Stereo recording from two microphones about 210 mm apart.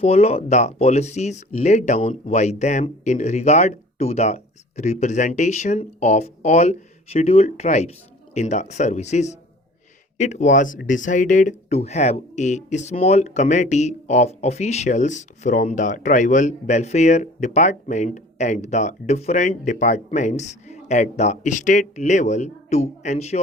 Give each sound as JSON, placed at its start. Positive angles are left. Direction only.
{"t": 0.0, "sound": "speech", "side_deg": 30}